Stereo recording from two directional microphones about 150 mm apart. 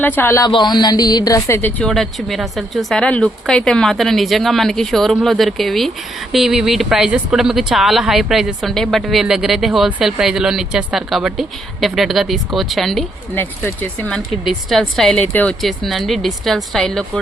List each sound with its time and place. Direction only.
0.2 s speech: 20° left (ahead or behind)
1.8 s a woman's voice: centre (ahead or behind)
13.3 s speech: 15° left (ahead or behind)
14.4 s a woman's voice: centre (ahead or behind)
15.6 s a woman's voice: centre (ahead or behind)